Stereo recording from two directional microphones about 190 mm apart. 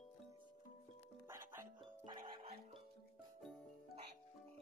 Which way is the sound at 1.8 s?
25° right (ahead or behind).